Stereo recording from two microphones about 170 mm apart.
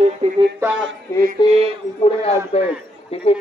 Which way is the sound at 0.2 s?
35° right (ahead or behind).